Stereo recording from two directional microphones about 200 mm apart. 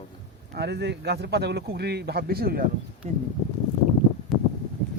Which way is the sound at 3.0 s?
30° right (ahead or behind).